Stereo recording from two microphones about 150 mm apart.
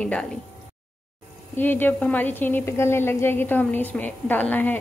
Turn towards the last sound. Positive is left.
turn(degrees=10)  # may be behind; listen again after turning